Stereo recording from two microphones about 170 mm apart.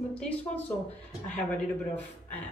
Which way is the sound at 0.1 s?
10° left (ahead or behind).